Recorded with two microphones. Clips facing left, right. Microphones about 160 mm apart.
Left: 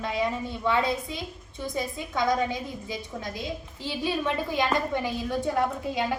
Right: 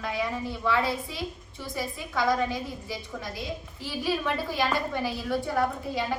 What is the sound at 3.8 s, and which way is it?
A woman's voice, 25° left (ahead or behind).